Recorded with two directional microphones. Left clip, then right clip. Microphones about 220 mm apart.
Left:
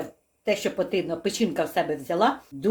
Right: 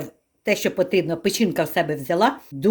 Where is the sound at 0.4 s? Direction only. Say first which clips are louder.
Right 4 dB; 45° right (ahead or behind).